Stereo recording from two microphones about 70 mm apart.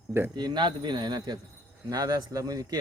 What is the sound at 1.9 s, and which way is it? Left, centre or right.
Speech, right.